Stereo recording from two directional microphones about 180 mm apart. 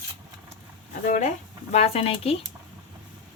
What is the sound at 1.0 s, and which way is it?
Speech, 45° left (ahead or behind).